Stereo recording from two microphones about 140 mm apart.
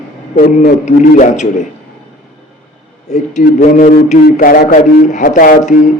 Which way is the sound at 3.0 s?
55° left (ahead or behind).